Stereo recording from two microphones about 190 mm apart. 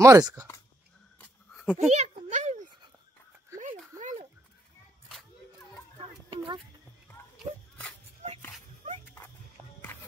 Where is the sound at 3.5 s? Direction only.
15° right (ahead or behind).